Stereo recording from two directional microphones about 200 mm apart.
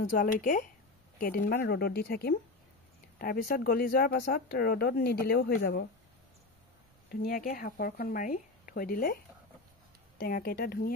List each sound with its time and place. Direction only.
0.1 s speech: 40° left (ahead or behind)
7.1 s speech: 45° left (ahead or behind)